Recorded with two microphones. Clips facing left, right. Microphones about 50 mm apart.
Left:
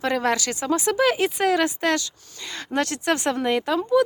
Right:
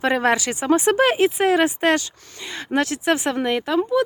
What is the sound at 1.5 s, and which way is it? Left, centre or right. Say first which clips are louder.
Speech: right 4 dB; right.